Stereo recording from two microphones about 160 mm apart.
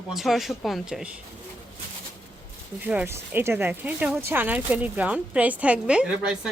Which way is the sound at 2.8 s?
10° right (ahead or behind).